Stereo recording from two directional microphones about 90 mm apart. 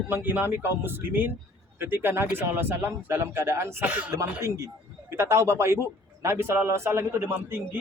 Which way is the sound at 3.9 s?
15° right (ahead or behind).